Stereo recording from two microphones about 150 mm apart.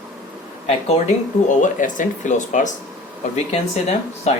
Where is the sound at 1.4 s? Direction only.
60° left (ahead or behind).